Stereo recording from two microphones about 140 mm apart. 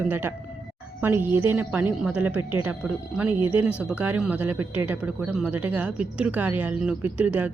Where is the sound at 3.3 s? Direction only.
35° left (ahead or behind).